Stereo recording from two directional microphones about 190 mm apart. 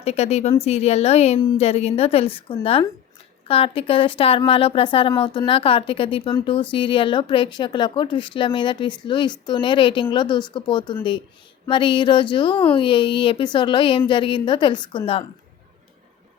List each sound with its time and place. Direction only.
0.0 s speech: 35° left (ahead or behind)